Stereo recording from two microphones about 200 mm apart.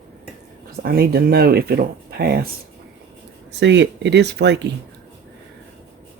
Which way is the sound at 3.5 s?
60° right (ahead or behind).